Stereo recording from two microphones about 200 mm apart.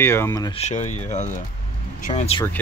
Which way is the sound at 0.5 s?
35° left (ahead or behind).